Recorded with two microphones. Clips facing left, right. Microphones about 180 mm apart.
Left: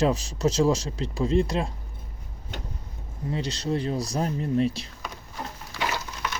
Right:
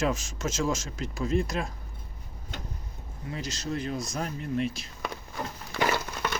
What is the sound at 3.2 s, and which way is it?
Speech, 30° left (ahead or behind).